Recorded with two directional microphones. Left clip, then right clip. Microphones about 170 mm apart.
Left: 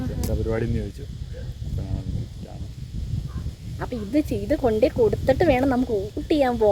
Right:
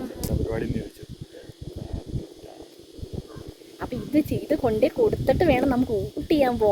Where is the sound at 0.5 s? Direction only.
Centre (ahead or behind).